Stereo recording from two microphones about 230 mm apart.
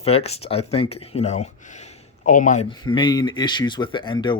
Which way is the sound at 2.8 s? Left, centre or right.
Centre.